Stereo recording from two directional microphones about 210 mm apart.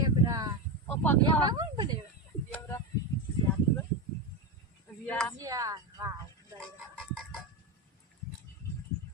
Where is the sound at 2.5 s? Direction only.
10° left (ahead or behind).